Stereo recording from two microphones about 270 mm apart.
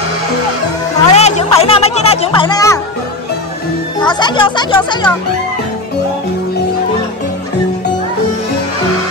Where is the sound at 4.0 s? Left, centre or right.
Centre.